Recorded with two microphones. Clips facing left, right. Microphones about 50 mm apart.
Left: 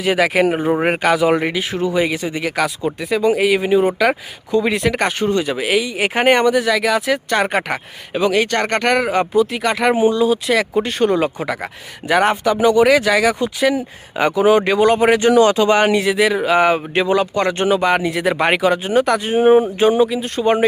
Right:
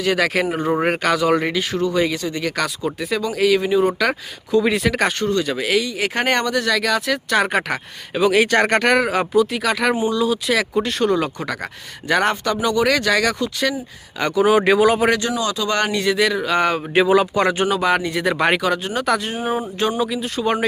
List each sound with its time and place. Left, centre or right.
0.0 s speech: centre
3.2 s speech: left; by 5.1 s centre
5.2 s speech: left
14.5 s speech: centre
15.4 s a sound: left
15.7 s speech: centre
16.0 s speech: centre
16.3 s speech: left
16.6 s speech: centre
16.9 s speech: centre
19.4 s a sound: left
20.0 s speech: centre